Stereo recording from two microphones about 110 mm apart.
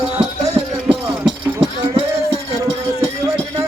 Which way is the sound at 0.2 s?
65° right (ahead or behind).